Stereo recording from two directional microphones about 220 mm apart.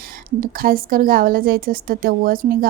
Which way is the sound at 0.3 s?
40° right (ahead or behind).